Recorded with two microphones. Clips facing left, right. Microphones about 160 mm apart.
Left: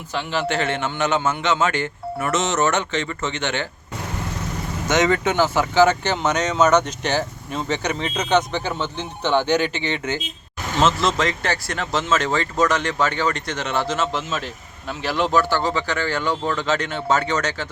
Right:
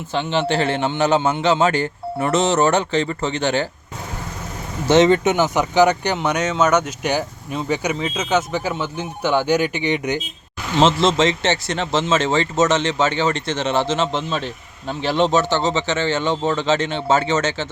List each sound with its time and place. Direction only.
0.1 s a man's voice: 25° right (ahead or behind)
4.9 s speech: 25° right (ahead or behind)
10.8 s speech: 25° right (ahead or behind)